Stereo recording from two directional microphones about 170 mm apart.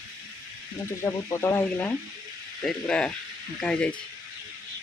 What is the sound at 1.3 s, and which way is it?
Speech, 15° left (ahead or behind).